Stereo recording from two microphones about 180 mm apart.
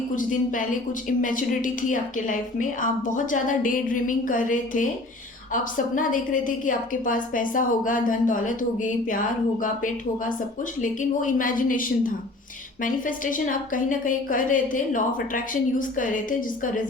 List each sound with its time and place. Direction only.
0.2 s a woman's voice: 45° left (ahead or behind)